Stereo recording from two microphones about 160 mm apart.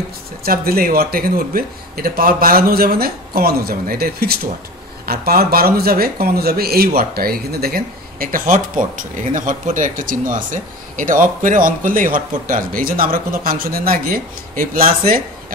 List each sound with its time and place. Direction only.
0.4 s speech: 70° right (ahead or behind)